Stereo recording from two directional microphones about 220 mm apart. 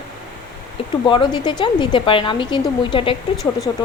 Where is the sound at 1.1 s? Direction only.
20° left (ahead or behind).